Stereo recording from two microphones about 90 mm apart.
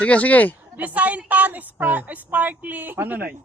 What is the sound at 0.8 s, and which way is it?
A woman's voice, 15° right (ahead or behind).